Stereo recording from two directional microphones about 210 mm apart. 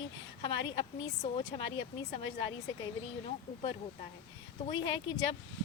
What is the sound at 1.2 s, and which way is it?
Speech, 25° left (ahead or behind).